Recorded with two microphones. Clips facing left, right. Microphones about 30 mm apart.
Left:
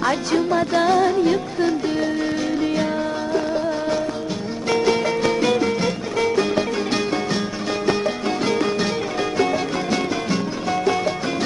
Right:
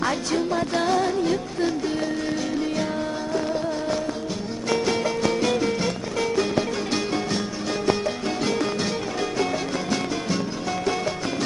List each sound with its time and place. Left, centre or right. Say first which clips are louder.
0.0 s music: left 4 dB; centre
4.6 s music: left 4 dB; centre